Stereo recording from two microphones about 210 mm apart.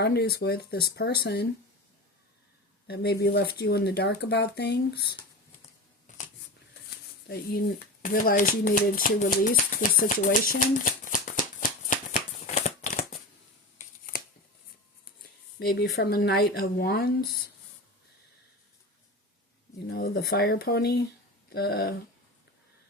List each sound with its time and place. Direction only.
0.0 s speech: 50° left (ahead or behind)
2.8 s speech: 50° left (ahead or behind)
7.3 s speech: 45° left (ahead or behind)
12.5 s shuffling cards: 30° left (ahead or behind)
15.5 s speech: 50° left (ahead or behind)
19.9 s speech: 50° left (ahead or behind)